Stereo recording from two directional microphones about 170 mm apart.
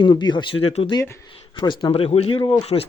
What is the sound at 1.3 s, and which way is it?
Speech, 30° left (ahead or behind).